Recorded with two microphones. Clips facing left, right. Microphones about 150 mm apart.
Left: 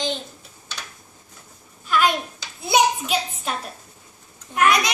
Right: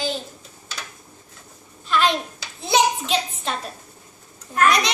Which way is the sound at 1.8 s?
10° left (ahead or behind).